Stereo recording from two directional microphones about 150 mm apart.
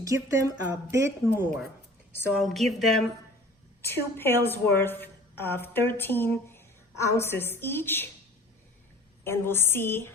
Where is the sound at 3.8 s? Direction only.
15° left (ahead or behind).